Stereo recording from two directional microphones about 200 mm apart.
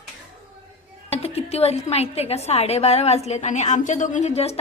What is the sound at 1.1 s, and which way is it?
A woman's voice, 30° left (ahead or behind).